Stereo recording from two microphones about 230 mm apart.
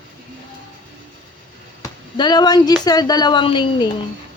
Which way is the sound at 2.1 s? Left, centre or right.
Centre.